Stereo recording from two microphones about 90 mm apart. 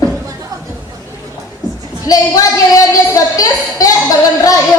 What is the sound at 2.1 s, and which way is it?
Speech, 40° left (ahead or behind).